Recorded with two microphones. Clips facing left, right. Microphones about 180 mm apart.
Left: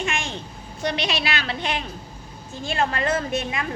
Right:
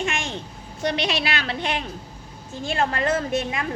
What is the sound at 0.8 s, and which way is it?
A woman's voice, 60° right (ahead or behind).